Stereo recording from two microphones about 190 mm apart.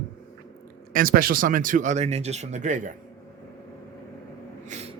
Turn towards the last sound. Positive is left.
turn(degrees=-35)  # may be behind; listen again after turning